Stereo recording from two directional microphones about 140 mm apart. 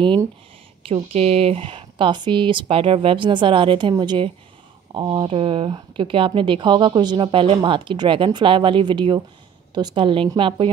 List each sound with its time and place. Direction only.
1.1 s speech: 45° right (ahead or behind)